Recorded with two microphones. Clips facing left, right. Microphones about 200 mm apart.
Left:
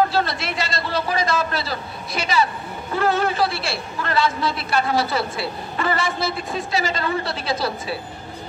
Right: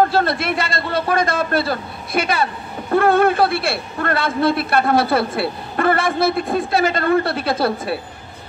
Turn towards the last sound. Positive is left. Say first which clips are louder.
# right 5 dB
turn(degrees=-55)  # may be behind; listen again after turning